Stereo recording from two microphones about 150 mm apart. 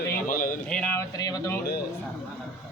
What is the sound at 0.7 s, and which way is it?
Speech, 10° left (ahead or behind).